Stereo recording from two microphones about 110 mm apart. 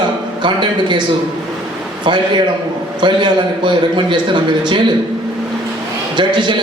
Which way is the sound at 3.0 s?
45° right (ahead or behind).